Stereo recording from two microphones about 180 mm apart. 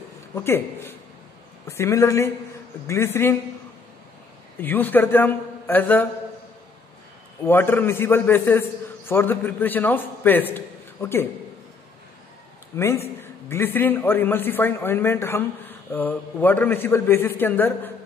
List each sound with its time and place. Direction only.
0.3 s a man's voice: 15° left (ahead or behind)
4.6 s a man's voice: 10° left (ahead or behind)
7.4 s a man's voice: 10° left (ahead or behind)
12.7 s a man's voice: 15° left (ahead or behind)